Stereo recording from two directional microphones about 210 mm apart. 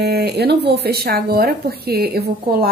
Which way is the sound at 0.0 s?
50° right (ahead or behind).